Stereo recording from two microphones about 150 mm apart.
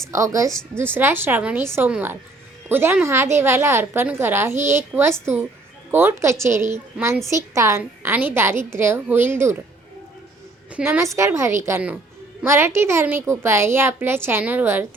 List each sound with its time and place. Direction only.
0.1 s a woman's voice: 20° right (ahead or behind)
10.8 s a woman's voice: 15° right (ahead or behind)